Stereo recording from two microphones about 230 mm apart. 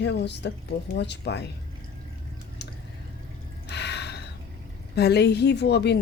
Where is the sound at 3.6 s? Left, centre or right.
Left.